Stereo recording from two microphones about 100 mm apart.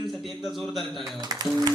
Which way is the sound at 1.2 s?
40° right (ahead or behind).